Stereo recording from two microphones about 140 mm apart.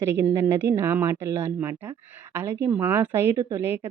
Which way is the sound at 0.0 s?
20° right (ahead or behind).